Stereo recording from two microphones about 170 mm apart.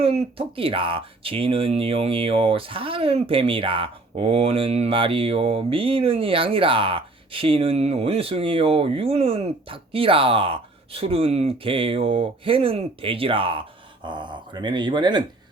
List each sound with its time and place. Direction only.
0.0 s speech: 35° right (ahead or behind)